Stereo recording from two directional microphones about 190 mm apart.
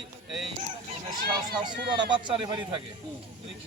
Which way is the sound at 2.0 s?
25° right (ahead or behind).